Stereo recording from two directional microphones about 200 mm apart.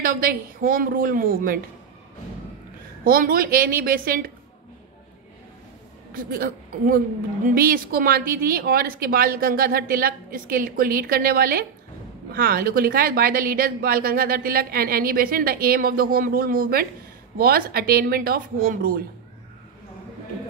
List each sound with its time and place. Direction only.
0.0 s a woman's voice: 45° right (ahead or behind)
3.0 s a woman's voice: 45° right (ahead or behind)
6.1 s a woman's voice: 45° right (ahead or behind)